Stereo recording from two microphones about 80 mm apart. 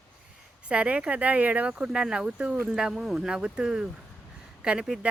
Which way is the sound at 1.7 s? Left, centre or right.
Centre.